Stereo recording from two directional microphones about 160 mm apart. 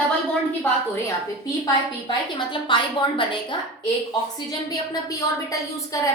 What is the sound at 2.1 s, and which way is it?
A woman's voice, 30° left (ahead or behind).